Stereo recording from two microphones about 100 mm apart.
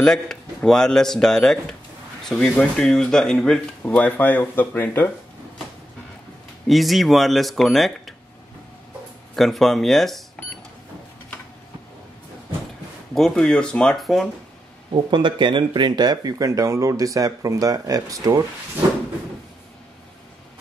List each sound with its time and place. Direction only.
0.0 s speech: 5° left (ahead or behind)
6.7 s speech: centre (ahead or behind)
9.3 s speech: centre (ahead or behind)
13.1 s speech: 5° left (ahead or behind)
15.0 s speech: 50° right (ahead or behind); by 18.4 s 35° right (ahead or behind)